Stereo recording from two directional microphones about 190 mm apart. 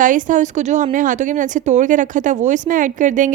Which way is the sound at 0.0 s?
45° right (ahead or behind).